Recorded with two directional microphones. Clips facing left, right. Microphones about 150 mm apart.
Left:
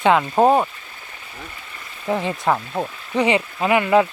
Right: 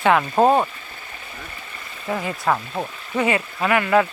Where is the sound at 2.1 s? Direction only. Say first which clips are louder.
Left 3 dB; 25° left (ahead or behind).